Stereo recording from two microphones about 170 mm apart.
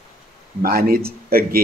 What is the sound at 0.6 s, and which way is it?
A man's voice, 60° right (ahead or behind).